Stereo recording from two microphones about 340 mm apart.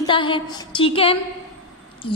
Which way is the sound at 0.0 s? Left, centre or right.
Centre.